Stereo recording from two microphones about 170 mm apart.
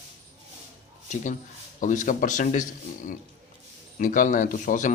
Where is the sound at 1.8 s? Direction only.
50° left (ahead or behind).